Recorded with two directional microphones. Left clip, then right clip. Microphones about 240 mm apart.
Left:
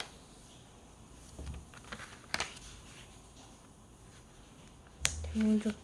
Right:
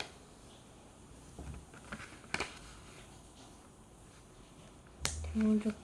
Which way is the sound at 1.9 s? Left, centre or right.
Centre.